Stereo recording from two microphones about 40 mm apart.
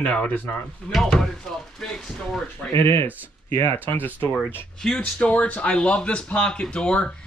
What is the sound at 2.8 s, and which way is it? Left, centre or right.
Speech, left.